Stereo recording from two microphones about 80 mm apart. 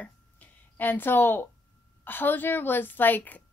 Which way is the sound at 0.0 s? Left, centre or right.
Left.